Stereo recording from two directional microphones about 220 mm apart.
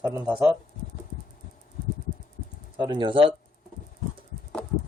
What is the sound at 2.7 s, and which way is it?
Speech, 20° right (ahead or behind).